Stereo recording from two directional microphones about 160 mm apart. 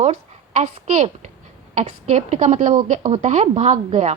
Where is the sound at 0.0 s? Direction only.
45° right (ahead or behind).